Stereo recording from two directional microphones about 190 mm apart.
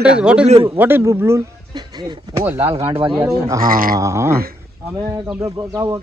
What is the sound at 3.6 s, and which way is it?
Speech, 50° right (ahead or behind).